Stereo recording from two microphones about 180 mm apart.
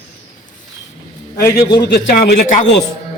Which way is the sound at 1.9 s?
65° left (ahead or behind).